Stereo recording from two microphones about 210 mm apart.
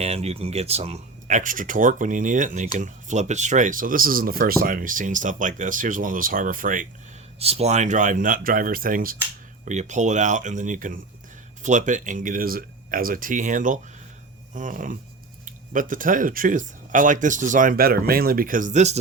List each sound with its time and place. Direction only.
0.0 s speech: 30° right (ahead or behind)
7.3 s speech: 30° right (ahead or behind)